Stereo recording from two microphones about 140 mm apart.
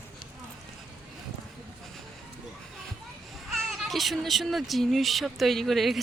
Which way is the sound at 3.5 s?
Centre (ahead or behind).